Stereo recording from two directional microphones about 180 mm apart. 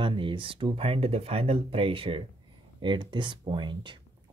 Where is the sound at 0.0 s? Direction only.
25° right (ahead or behind).